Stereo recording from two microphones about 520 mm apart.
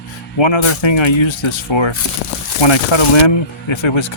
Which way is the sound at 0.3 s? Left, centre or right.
Left.